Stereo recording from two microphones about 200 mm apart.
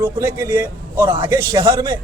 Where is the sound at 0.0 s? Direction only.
10° right (ahead or behind).